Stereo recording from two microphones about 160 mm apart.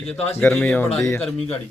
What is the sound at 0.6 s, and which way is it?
Speech, 15° left (ahead or behind).